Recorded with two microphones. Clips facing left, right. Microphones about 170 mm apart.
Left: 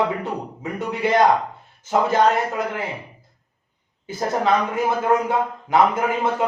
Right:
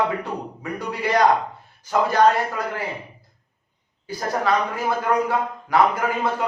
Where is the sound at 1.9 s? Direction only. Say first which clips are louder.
Even; 20° left (ahead or behind).